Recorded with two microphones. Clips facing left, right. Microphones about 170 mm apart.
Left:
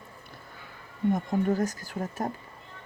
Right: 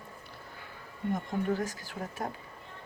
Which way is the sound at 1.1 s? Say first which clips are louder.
Left 5 dB; 45° left (ahead or behind).